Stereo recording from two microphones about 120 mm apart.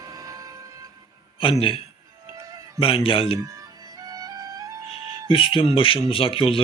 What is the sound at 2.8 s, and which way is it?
Speech, 50° left (ahead or behind).